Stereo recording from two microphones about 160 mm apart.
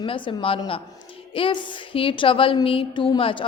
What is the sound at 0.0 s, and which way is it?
A woman's voice, 35° left (ahead or behind).